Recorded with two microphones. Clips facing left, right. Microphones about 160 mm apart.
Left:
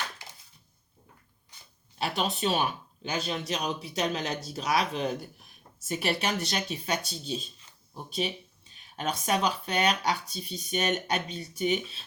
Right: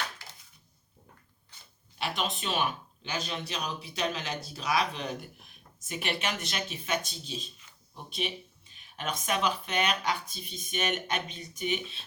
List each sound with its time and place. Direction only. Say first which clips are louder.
2.0 s speech: left 4 dB; 40° left (ahead or behind)
9.0 s speech: left 3 dB; 35° left (ahead or behind)